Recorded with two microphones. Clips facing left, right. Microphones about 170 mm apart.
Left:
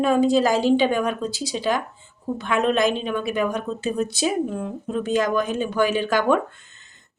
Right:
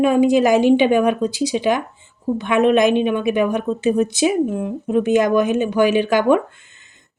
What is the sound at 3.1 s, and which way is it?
Speech, 20° right (ahead or behind).